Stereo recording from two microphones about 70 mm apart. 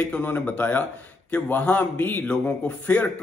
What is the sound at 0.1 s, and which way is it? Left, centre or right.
A man's voice, left.